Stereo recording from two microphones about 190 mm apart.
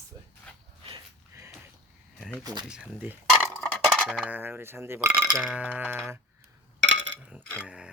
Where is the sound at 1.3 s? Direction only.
15° right (ahead or behind).